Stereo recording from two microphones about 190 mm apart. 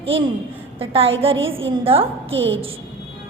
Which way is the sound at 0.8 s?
30° right (ahead or behind).